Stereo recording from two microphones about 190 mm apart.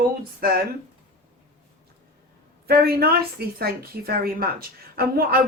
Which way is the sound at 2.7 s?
55° right (ahead or behind).